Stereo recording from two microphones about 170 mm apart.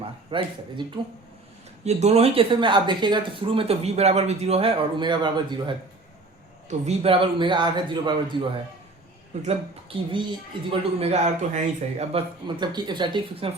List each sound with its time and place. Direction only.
0.3 s a man's voice: 30° right (ahead or behind)
1.8 s speech: 40° right (ahead or behind)
6.7 s a man's voice: 40° right (ahead or behind)
9.5 s speech: 30° right (ahead or behind)
12.5 s a man's voice: 25° right (ahead or behind)